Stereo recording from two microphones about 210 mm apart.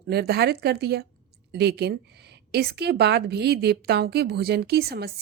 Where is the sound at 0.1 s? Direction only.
50° right (ahead or behind).